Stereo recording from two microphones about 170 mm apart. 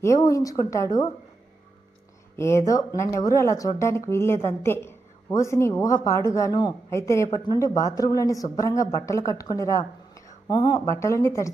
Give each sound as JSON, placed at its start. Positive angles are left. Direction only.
{"t": 0.0, "sound": "a woman's voice", "side_deg": 20}
{"t": 2.3, "sound": "a woman's voice", "side_deg": 15}